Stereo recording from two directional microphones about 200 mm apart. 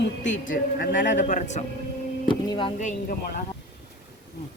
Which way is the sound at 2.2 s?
25° left (ahead or behind).